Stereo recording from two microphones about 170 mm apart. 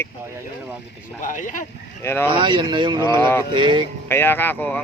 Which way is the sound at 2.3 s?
25° right (ahead or behind).